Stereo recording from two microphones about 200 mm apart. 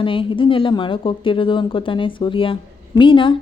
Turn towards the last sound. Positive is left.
turn(degrees=25)  # may be behind; listen again after turning